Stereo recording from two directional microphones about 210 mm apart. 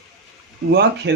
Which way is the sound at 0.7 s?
55° right (ahead or behind).